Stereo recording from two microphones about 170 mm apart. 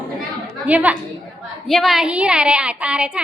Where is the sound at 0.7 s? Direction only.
10° right (ahead or behind).